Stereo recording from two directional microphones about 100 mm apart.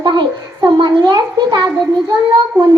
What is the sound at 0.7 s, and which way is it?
Speech, 50° right (ahead or behind).